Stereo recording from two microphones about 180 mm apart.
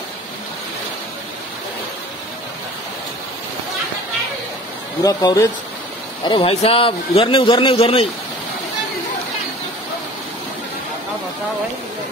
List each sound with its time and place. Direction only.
5.0 s a man's voice: 20° left (ahead or behind)